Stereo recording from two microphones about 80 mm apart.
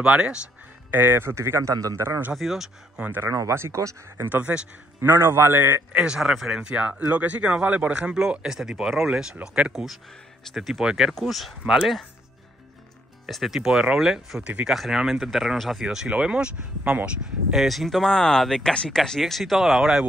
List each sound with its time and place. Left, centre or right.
0.0 s speech: centre
0.9 s speech: right
2.0 s a man's voice: right
2.3 s speech: centre
3.2 s speech: right
4.3 s a man's voice: centre
5.9 s speech: centre
13.3 s speech: centre
17.6 s speech: centre